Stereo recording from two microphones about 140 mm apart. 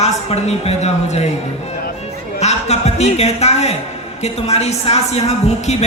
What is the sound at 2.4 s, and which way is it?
A woman's voice, 50° left (ahead or behind).